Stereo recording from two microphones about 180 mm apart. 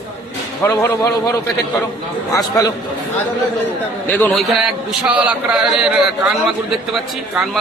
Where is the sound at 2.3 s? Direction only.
20° left (ahead or behind).